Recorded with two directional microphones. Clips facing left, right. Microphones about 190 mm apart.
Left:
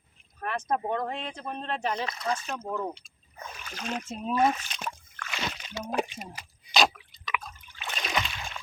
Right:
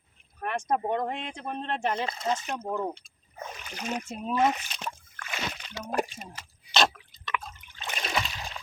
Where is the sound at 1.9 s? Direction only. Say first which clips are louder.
Right 1 dB; 25° right (ahead or behind); by 4.3 s centre (ahead or behind).